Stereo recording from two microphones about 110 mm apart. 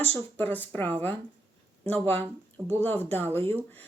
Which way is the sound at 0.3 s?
15° left (ahead or behind).